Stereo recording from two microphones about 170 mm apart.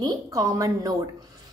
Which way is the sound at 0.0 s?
20° right (ahead or behind).